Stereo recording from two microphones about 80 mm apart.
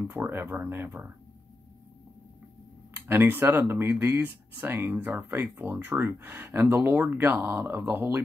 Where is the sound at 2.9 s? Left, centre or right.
Right.